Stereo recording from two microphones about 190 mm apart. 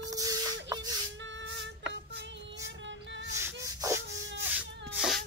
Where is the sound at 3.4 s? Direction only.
15° right (ahead or behind).